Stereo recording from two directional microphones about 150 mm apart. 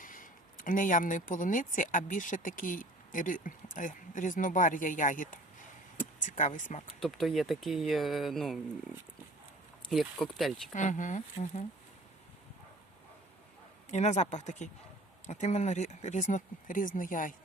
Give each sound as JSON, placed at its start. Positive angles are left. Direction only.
{"t": 0.0, "sound": "speech", "side_deg": 65}
{"t": 7.0, "sound": "speech", "side_deg": 0}
{"t": 9.9, "sound": "speech", "side_deg": 0}
{"t": 10.8, "sound": "speech", "side_deg": 55}
{"t": 13.9, "sound": "speech", "side_deg": 50}